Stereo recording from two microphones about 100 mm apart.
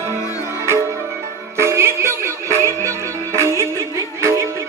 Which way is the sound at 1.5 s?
25° right (ahead or behind).